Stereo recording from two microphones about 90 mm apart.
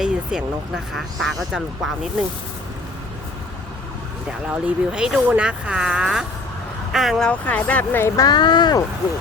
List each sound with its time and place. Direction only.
0.0 s vehicle: 10° right (ahead or behind)
0.9 s speech: centre (ahead or behind)
4.3 s speech: 10° right (ahead or behind)
7.3 s speech: 15° left (ahead or behind)
8.0 s speech: 35° left (ahead or behind)
8.3 s speech: 55° left (ahead or behind)